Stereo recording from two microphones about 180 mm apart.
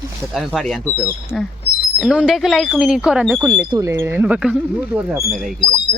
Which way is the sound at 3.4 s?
20° right (ahead or behind).